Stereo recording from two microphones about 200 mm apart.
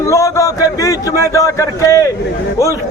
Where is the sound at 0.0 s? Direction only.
15° left (ahead or behind).